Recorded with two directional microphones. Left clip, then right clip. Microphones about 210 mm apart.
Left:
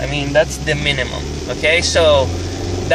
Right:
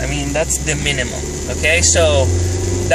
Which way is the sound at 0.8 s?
5° right (ahead or behind).